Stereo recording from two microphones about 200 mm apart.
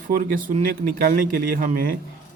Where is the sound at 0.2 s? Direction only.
45° right (ahead or behind).